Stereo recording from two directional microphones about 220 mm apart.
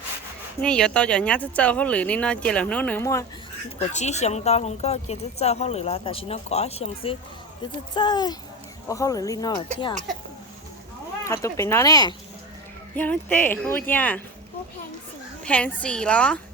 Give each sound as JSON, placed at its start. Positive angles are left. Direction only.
{"t": 0.6, "sound": "speech", "side_deg": 5}
{"t": 3.8, "sound": "speech", "side_deg": 30}
{"t": 9.9, "sound": "speech", "side_deg": -35}
{"t": 11.3, "sound": "speech", "side_deg": 10}
{"t": 15.4, "sound": "speech", "side_deg": 5}